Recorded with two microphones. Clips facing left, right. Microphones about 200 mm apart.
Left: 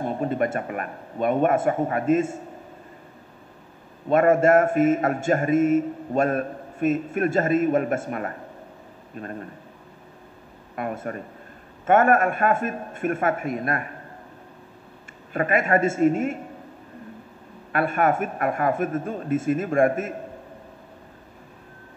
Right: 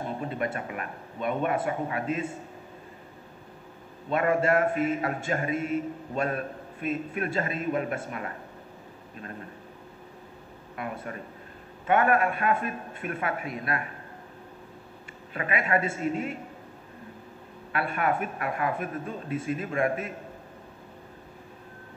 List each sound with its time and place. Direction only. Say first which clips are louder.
0.2 s a man's voice: left 7 dB; 45° left (ahead or behind)
4.1 s a man's voice: left 7 dB; 45° left (ahead or behind)
10.8 s a man's voice: left 6 dB; 50° left (ahead or behind)
15.3 s a man's voice: left 6 dB; 45° left (ahead or behind)
17.7 s a man's voice: left 6 dB; 45° left (ahead or behind)